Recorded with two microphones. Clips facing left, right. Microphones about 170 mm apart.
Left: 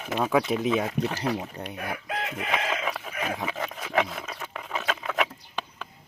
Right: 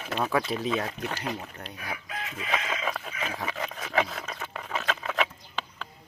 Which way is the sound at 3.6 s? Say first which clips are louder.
Left 1 dB; 20° left (ahead or behind).